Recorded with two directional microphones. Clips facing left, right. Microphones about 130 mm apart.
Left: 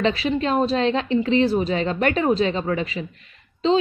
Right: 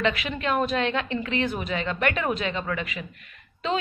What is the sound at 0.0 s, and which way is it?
A woman's voice, 30° left (ahead or behind).